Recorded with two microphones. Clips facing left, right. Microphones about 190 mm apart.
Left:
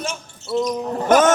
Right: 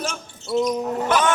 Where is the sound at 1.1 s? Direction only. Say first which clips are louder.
Left 7 dB; 45° left (ahead or behind).